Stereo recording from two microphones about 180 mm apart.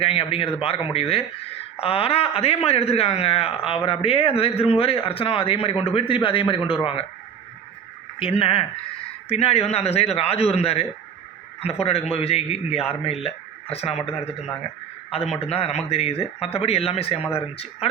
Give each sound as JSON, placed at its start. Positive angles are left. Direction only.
{"t": 0.0, "sound": "speech", "side_deg": 30}
{"t": 8.2, "sound": "speech", "side_deg": 30}
{"t": 15.4, "sound": "speech", "side_deg": 35}